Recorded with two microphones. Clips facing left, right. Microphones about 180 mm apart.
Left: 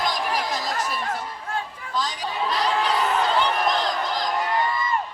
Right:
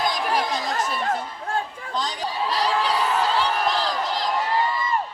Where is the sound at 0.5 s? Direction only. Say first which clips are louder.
Right 1 dB; 30° right (ahead or behind).